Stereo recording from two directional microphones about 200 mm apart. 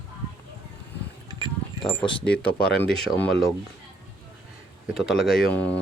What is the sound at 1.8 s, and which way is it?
Speech, centre (ahead or behind).